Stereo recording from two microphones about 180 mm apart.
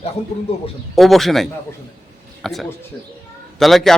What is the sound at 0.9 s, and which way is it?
A man's voice, centre (ahead or behind).